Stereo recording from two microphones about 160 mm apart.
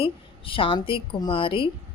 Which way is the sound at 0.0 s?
35° left (ahead or behind).